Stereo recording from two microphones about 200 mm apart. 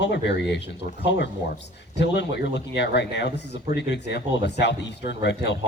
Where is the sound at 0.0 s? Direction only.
60° left (ahead or behind).